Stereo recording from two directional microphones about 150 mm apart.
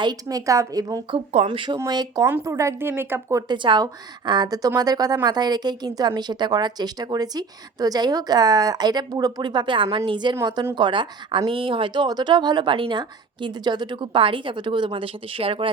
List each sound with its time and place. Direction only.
0.0 s a woman's voice: 25° right (ahead or behind)
1.1 s a woman's voice: 40° right (ahead or behind); by 3.4 s 15° right (ahead or behind)
3.5 s a woman's voice: 30° right (ahead or behind)